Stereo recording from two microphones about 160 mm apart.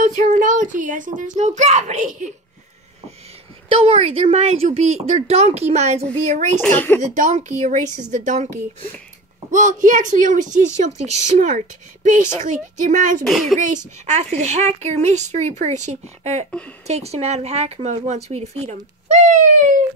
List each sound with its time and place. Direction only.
0.0 s a child's voice: 55° right (ahead or behind)
3.6 s a woman's voice: 40° right (ahead or behind)
6.6 s speech: 10° left (ahead or behind)
7.0 s speech: 50° right (ahead or behind)
9.5 s speech: 55° right (ahead or behind)
13.2 s speech: centre (ahead or behind)
13.6 s speech: 50° right (ahead or behind)